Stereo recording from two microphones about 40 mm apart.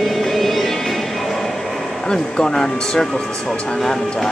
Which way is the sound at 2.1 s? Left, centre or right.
Centre.